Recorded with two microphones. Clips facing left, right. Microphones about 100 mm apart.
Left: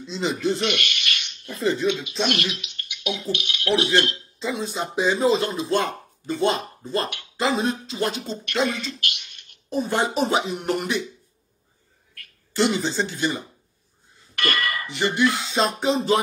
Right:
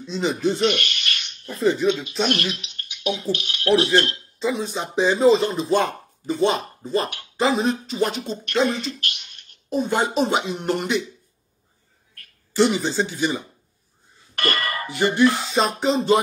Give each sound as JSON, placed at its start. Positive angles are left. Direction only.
{"t": 0.0, "sound": "speech", "side_deg": 0}
{"t": 0.6, "sound": "a sound", "side_deg": -35}
{"t": 1.6, "sound": "speech", "side_deg": 0}
{"t": 2.6, "sound": "speech", "side_deg": -40}
{"t": 4.4, "sound": "speech", "side_deg": 0}
{"t": 8.6, "sound": "speech", "side_deg": -40}
{"t": 9.7, "sound": "speech", "side_deg": 0}
{"t": 12.5, "sound": "speech", "side_deg": 0}
{"t": 14.3, "sound": "bell", "side_deg": -40}
{"t": 15.3, "sound": "speech", "side_deg": 0}